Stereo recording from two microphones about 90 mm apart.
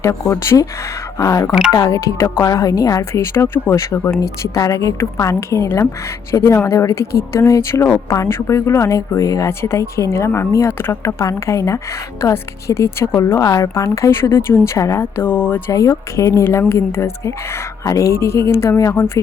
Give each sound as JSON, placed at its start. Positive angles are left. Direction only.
{"t": 0.0, "sound": "a woman's voice", "side_deg": 35}
{"t": 3.0, "sound": "a woman's voice", "side_deg": 25}
{"t": 9.5, "sound": "a woman's voice", "side_deg": 30}
{"t": 15.2, "sound": "a woman's voice", "side_deg": 20}
{"t": 15.7, "sound": "a woman's voice", "side_deg": 35}